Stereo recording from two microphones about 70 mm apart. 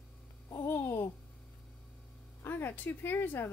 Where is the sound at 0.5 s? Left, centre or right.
Left.